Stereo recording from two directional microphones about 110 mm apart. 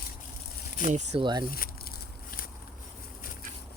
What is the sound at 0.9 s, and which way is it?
Speech, 90° right.